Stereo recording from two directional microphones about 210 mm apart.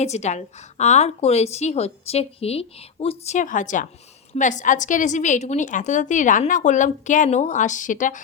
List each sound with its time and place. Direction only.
0.0 s a woman's voice: 35° left (ahead or behind)